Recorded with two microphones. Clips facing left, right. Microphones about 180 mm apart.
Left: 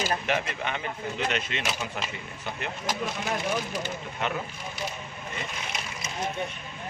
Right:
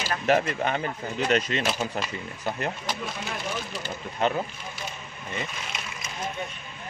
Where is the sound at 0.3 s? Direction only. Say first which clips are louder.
Right 6 dB; 40° right (ahead or behind).